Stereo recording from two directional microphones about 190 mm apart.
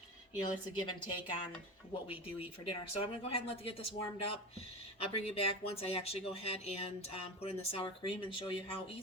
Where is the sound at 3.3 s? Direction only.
30° left (ahead or behind).